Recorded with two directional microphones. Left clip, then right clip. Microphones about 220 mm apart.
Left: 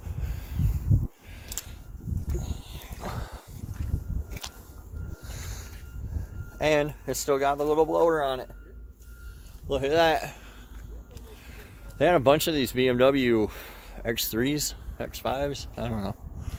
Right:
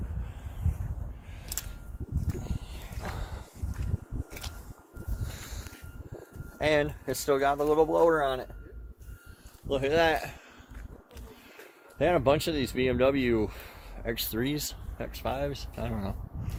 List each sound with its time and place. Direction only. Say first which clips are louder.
2.4 s a sound: left 1 dB; 40° left (ahead or behind)
6.6 s speech: left 2 dB; 25° left (ahead or behind); by 8.4 s 5° left (ahead or behind)
9.6 s speech: left 3 dB; 25° left (ahead or behind)
11.9 s speech: left 4 dB; 60° left (ahead or behind); by 16.1 s 40° left (ahead or behind)